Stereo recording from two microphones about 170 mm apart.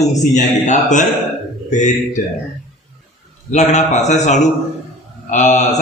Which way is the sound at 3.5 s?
45° left (ahead or behind).